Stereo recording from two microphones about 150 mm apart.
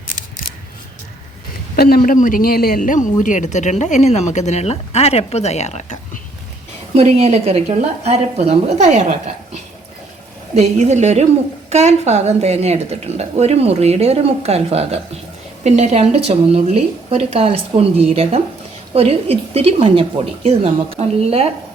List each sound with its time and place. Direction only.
1.7 s a man's voice: 85° left; by 6.0 s 50° left (ahead or behind)
6.9 s a woman's voice: 45° right (ahead or behind)
10.6 s a woman's voice: 50° right (ahead or behind)